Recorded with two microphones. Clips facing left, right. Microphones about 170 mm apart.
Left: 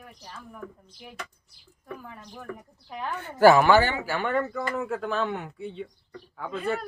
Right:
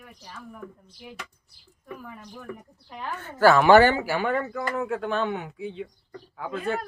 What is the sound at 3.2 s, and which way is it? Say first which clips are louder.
Speech: left 2 dB; 15° left (ahead or behind).